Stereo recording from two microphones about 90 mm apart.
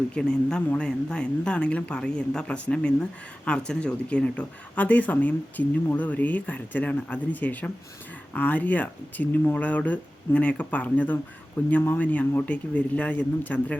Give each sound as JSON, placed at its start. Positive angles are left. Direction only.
{"t": 0.1, "sound": "speech", "side_deg": 10}